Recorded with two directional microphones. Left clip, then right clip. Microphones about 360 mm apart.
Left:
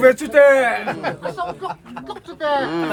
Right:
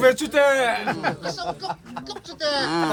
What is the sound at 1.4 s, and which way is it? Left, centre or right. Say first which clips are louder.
Speech: left 3 dB; right.